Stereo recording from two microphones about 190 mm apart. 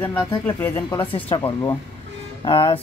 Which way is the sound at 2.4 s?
30° left (ahead or behind).